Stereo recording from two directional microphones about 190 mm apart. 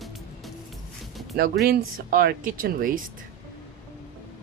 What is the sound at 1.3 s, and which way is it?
Speech, 55° right (ahead or behind).